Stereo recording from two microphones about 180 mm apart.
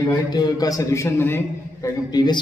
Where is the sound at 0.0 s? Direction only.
25° left (ahead or behind).